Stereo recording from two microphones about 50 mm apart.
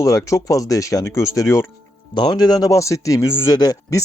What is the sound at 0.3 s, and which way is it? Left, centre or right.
Speech, left.